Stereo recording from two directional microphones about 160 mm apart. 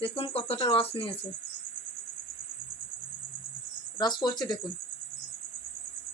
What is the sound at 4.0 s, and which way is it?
Speech, 25° left (ahead or behind).